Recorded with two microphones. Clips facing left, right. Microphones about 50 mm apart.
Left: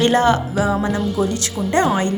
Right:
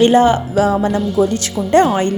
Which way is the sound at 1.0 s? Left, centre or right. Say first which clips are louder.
Right 5 dB; centre.